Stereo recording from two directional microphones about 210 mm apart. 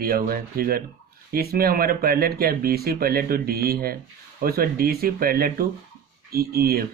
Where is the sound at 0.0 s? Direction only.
45° right (ahead or behind).